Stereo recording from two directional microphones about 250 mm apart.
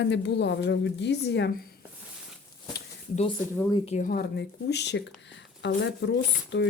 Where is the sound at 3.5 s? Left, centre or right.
Centre.